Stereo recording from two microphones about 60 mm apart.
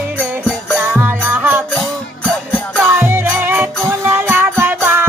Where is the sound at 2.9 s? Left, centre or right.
Right.